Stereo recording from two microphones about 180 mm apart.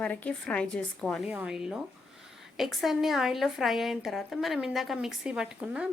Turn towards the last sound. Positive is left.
turn(degrees=-5)  # may be behind; listen again after turning